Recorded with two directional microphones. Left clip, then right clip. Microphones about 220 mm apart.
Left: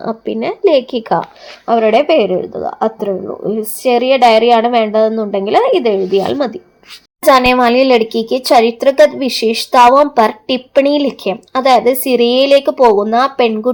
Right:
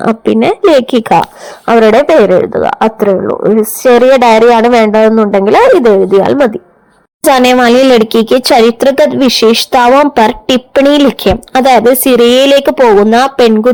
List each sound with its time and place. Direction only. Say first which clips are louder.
0.0 s speech: right 9 dB; 35° right (ahead or behind)